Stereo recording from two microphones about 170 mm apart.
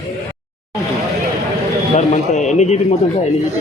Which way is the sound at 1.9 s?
45° left (ahead or behind).